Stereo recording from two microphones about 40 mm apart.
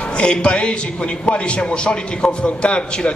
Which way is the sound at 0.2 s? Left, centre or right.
Left.